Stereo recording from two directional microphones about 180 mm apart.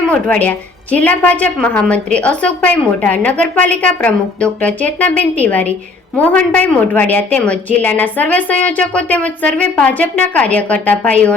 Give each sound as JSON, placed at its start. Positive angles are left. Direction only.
{"t": 0.1, "sound": "a woman's voice", "side_deg": 10}